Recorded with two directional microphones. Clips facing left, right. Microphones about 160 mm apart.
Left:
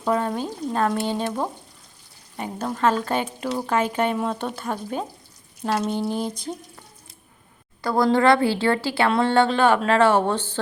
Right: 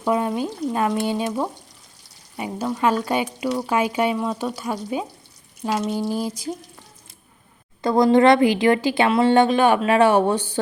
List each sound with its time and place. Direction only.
0.0 s speech: 10° right (ahead or behind)
2.3 s speech: 10° right (ahead or behind)
4.2 s speech: 5° left (ahead or behind)
7.8 s speech: 20° right (ahead or behind)